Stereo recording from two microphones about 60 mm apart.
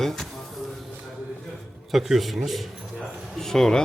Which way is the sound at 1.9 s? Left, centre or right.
Centre.